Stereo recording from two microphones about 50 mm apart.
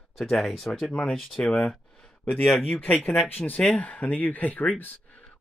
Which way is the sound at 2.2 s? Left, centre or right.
Left.